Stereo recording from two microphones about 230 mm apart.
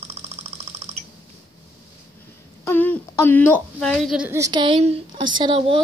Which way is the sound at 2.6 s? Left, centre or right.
Centre.